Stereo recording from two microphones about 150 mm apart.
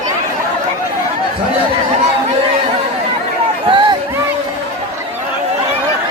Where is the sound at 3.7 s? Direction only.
35° right (ahead or behind).